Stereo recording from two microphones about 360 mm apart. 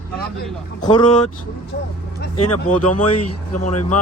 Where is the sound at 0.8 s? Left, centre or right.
Centre.